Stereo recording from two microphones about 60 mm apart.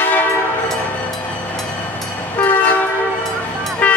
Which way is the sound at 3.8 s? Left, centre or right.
Left.